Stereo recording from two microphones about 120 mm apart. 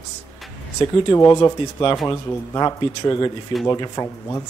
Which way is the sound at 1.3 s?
35° left (ahead or behind).